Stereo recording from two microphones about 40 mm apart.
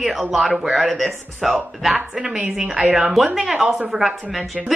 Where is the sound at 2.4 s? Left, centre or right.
Centre.